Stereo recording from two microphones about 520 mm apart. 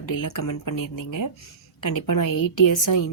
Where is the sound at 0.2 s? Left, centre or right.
Left.